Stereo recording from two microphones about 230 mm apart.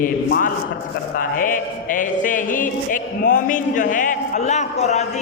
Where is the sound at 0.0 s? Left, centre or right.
Left.